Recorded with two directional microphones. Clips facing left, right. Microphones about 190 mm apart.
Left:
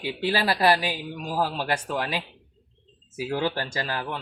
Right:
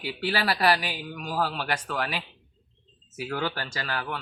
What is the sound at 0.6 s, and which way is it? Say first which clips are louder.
Speech: left 3 dB; 20° left (ahead or behind).